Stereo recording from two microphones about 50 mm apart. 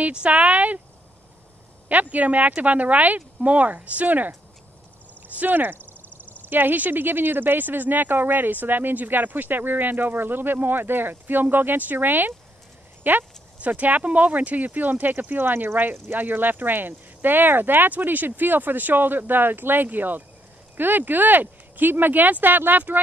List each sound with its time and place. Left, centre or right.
0.1 s speech: right
1.9 s speech: right
5.4 s speech: right